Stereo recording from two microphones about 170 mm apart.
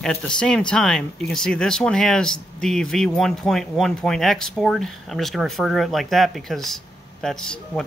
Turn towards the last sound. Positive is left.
turn(degrees=5)  # may be behind; listen again after turning